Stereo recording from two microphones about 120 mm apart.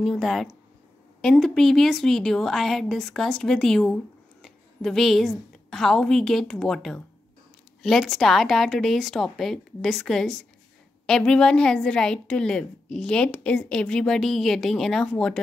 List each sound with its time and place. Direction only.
0.0 s a woman's voice: centre (ahead or behind)